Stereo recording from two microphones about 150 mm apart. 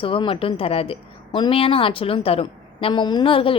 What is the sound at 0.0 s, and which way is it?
A woman's voice, 35° left (ahead or behind).